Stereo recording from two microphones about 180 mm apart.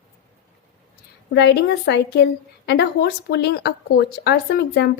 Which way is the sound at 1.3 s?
70° left (ahead or behind).